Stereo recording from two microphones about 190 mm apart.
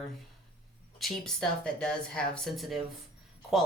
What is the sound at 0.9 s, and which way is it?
Speech, centre (ahead or behind).